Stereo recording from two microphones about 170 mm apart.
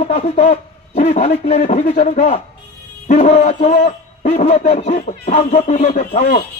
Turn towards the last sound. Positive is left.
turn(degrees=45)  # may be behind; listen again after turning